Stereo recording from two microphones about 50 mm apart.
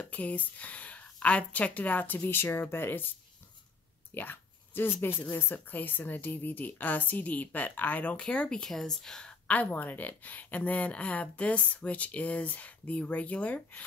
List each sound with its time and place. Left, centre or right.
0.0 s speech: left
4.1 s a sound: left
5.3 s speech: left
8.2 s speech: centre
9.5 s speech: left